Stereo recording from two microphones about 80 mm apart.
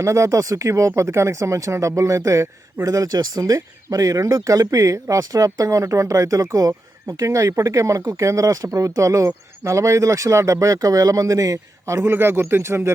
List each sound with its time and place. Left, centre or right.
0.0 s speech: right